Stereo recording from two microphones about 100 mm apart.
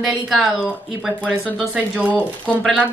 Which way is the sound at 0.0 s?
Centre (ahead or behind).